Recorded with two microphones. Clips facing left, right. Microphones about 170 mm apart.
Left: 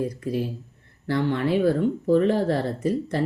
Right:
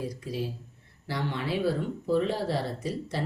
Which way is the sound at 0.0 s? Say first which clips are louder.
Left 7 dB; 55° left (ahead or behind).